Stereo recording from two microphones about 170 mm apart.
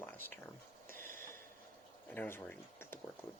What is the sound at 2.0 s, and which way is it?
Speech, 10° left (ahead or behind).